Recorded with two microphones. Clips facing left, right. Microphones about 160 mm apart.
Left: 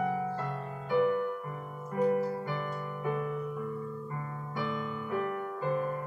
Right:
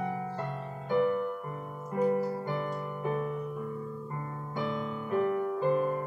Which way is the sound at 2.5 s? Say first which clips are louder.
Right 3 dB; 20° right (ahead or behind).